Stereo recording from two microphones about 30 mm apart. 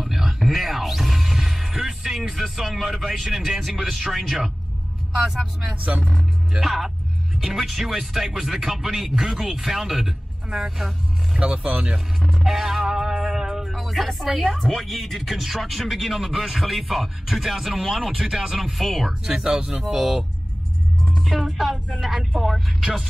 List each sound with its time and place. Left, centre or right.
0.0 s music: centre
2.5 s speech: centre
6.6 s speech: centre
11.5 s speech: right
12.4 s music: centre
13.2 s a sound: centre
13.7 s speech: centre
19.2 s speech: centre
19.8 s speech: centre
21.0 s music: centre
21.3 s speech: centre